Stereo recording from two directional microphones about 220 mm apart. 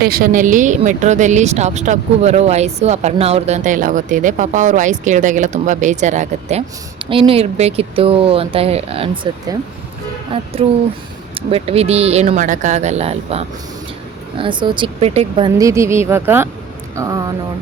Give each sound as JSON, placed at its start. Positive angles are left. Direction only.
{"t": 0.0, "sound": "speech", "side_deg": -40}